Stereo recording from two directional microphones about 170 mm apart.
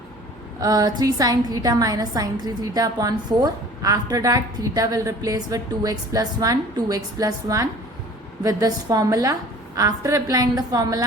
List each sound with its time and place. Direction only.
0.6 s a woman's voice: 20° right (ahead or behind)